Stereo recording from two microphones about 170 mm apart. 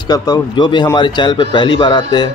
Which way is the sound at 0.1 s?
25° left (ahead or behind).